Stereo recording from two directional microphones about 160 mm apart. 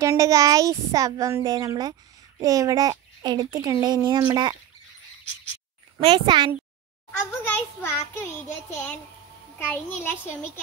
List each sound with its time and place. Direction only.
0.0 s a child's voice: 20° right (ahead or behind)
5.9 s a child's voice: 35° right (ahead or behind)
7.1 s a child's voice: 15° left (ahead or behind)
9.6 s a child's voice: 15° left (ahead or behind)